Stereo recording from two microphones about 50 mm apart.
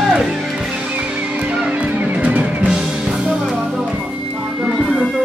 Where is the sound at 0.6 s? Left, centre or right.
Centre.